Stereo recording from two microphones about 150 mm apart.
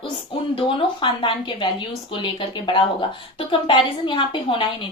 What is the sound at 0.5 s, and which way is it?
A woman's voice, 35° left (ahead or behind).